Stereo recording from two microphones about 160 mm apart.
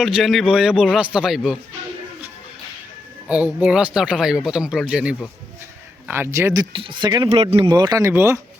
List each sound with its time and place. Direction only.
0.0 s speech: centre (ahead or behind)
3.2 s speech: 10° right (ahead or behind)
6.1 s speech: 15° right (ahead or behind)